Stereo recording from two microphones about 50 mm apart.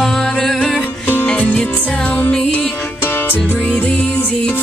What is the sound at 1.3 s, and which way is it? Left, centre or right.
Music, left.